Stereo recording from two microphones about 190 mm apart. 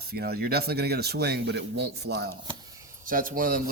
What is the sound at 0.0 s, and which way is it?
Speech, 55° right (ahead or behind).